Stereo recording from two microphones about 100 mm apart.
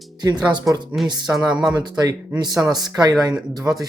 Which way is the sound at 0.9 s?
5° right (ahead or behind).